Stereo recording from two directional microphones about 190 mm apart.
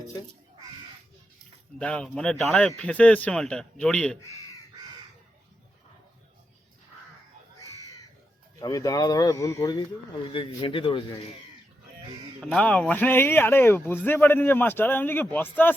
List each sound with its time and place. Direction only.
1.8 s speech: 5° left (ahead or behind)
8.5 s speech: 20° left (ahead or behind)
10.2 s a man's voice: 25° left (ahead or behind)
12.4 s speech: centre (ahead or behind)